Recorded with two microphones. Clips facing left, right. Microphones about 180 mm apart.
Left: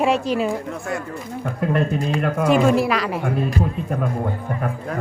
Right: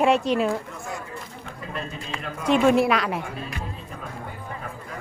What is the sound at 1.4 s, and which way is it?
A man's voice, 65° left (ahead or behind).